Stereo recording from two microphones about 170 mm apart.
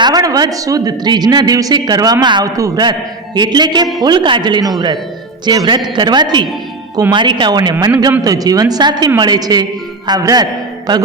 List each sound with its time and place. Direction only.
0.0 s a man's voice: 20° right (ahead or behind)